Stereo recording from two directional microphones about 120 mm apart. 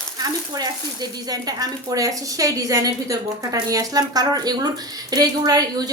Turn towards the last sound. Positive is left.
turn(degrees=-30)  # may be behind; listen again after turning